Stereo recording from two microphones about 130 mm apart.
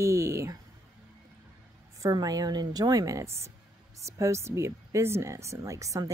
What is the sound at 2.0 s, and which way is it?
Speech, 25° right (ahead or behind).